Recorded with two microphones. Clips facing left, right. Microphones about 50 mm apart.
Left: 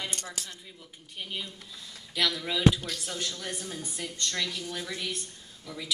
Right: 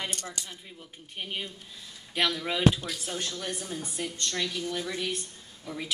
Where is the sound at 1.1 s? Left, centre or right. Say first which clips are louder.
Right 2 dB; right.